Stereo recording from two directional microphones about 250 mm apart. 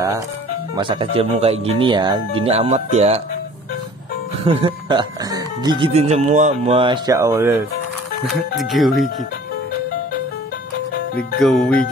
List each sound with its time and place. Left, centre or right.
0.7 s speech: centre
4.5 s speech: right; by 9.0 s centre
11.3 s speech: centre